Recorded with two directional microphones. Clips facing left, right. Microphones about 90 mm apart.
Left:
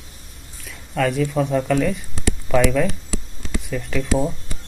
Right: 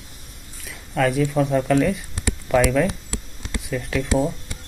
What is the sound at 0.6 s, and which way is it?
Speech, centre (ahead or behind).